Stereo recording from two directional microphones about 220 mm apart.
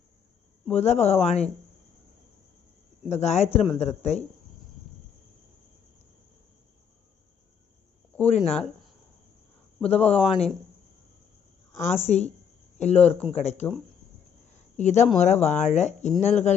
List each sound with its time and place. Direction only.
0.7 s speech: 30° left (ahead or behind)
3.1 s speech: 30° left (ahead or behind)
8.2 s speech: 30° left (ahead or behind)
9.8 s speech: 30° left (ahead or behind)
12.0 s speech: 30° left (ahead or behind)